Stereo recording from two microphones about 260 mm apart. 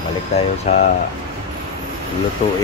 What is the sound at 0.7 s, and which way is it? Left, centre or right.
Speech, left.